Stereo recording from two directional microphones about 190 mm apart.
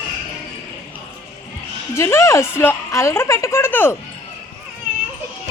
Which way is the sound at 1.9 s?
15° left (ahead or behind).